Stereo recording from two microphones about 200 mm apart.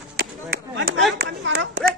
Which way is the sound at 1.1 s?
60° right (ahead or behind).